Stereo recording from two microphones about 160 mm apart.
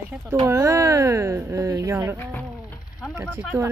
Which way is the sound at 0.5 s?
15° right (ahead or behind).